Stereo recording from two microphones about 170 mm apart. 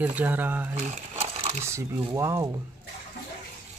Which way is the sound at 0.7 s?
40° right (ahead or behind).